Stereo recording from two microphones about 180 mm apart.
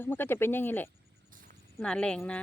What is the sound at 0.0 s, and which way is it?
A woman's voice, 10° left (ahead or behind).